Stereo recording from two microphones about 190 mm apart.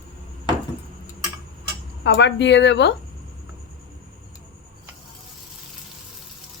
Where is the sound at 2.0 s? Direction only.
70° left (ahead or behind).